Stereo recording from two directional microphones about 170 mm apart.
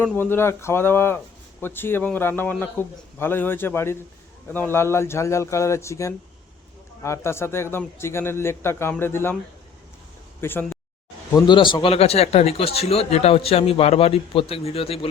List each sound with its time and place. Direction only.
0.0 s a man's voice: 10° left (ahead or behind)
10.4 s a man's voice: 10° left (ahead or behind)
11.3 s speech: 25° left (ahead or behind)